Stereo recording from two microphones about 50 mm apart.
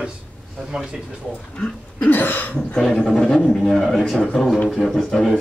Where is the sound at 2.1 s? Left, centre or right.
Left.